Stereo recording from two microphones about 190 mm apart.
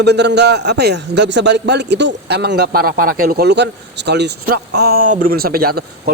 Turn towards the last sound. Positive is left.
turn(degrees=-50)  # may be behind; listen again after turning